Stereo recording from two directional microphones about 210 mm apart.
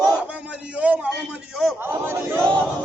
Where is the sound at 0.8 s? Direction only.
5° right (ahead or behind).